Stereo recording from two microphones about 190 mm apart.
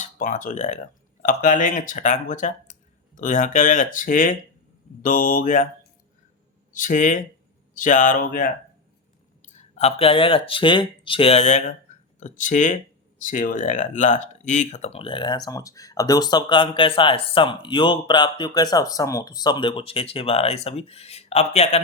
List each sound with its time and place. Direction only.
0.0 s speech: 40° left (ahead or behind)
6.7 s speech: 45° left (ahead or behind)